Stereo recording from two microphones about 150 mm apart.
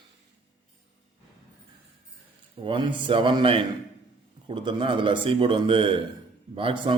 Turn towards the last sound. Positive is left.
turn(degrees=-35)  # may be behind; listen again after turning